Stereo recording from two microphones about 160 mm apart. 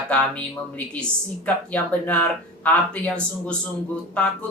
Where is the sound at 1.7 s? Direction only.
10° left (ahead or behind).